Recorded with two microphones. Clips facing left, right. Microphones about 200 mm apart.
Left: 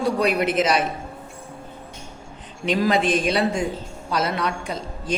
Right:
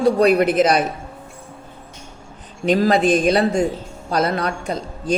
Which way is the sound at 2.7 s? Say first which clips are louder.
Right 5 dB; 40° right (ahead or behind).